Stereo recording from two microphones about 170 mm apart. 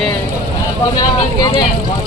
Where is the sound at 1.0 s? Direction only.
25° left (ahead or behind).